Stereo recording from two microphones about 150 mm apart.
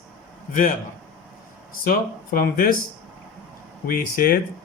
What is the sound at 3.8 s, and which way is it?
Speech, 75° left (ahead or behind).